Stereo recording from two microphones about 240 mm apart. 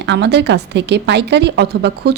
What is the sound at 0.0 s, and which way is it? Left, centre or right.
A woman's voice, right.